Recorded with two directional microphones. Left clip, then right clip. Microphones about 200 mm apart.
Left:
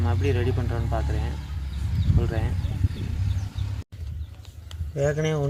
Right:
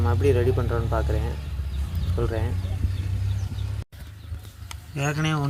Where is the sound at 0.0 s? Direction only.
5° left (ahead or behind).